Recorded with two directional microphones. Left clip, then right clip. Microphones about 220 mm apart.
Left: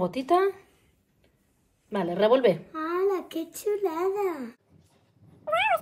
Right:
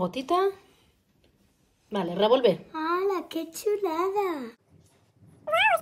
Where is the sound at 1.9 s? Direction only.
5° right (ahead or behind).